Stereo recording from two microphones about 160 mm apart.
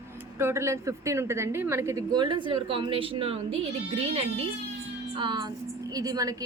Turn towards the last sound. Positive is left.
turn(degrees=-20)  # may be behind; listen again after turning